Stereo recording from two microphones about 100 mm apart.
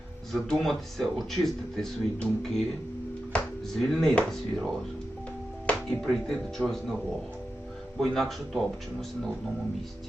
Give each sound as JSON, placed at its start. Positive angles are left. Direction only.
{"t": 0.3, "sound": "speech", "side_deg": 5}
{"t": 7.9, "sound": "speech", "side_deg": 0}